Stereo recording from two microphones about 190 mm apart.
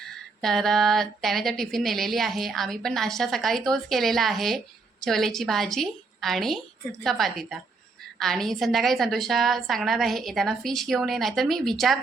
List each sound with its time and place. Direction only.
0.0 s speech: centre (ahead or behind)